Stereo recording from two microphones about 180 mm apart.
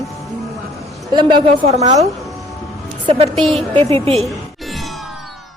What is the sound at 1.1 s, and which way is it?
Speech, 25° right (ahead or behind).